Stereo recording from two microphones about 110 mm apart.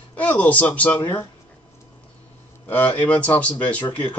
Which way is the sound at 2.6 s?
15° left (ahead or behind).